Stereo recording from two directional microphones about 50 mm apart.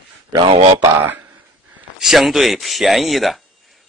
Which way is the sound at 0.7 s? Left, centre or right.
Right.